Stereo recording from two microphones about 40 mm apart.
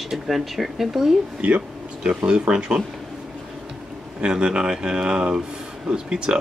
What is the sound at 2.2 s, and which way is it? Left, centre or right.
Speech, right.